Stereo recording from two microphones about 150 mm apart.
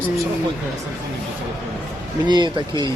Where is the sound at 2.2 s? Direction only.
30° right (ahead or behind).